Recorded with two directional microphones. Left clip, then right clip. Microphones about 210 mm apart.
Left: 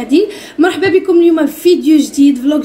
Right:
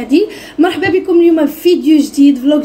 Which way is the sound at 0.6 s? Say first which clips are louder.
Left 1 dB; centre (ahead or behind).